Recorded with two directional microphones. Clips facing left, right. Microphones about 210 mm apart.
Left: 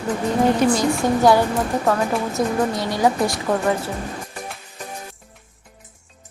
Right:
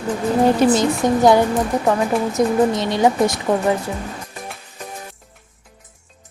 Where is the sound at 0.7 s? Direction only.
20° right (ahead or behind).